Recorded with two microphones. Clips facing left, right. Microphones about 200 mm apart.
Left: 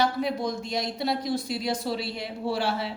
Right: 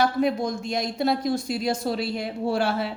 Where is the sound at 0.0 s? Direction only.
50° right (ahead or behind).